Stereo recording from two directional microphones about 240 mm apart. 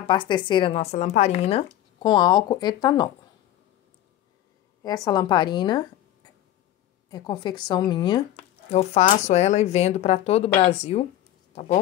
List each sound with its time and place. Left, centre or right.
0.1 s speech: centre
4.8 s a woman's voice: centre
7.1 s speech: centre